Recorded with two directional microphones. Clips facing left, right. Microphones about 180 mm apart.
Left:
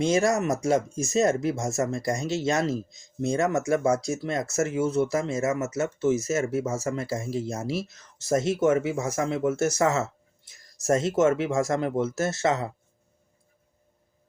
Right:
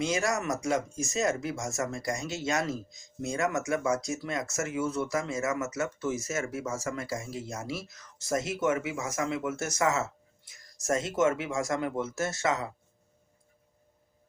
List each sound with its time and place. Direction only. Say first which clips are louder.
0.0 s speech: left 7 dB; 30° left (ahead or behind)